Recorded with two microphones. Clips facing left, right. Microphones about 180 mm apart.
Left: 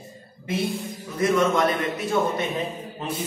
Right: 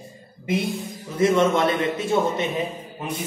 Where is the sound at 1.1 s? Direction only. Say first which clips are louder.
Right 2 dB; 25° right (ahead or behind).